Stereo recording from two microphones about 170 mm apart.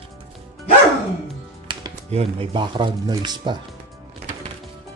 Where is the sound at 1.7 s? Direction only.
30° right (ahead or behind).